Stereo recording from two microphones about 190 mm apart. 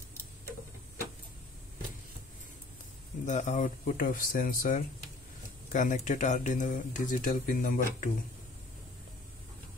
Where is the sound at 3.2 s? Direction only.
40° left (ahead or behind).